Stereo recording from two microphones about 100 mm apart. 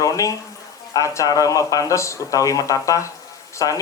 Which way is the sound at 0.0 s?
35° left (ahead or behind).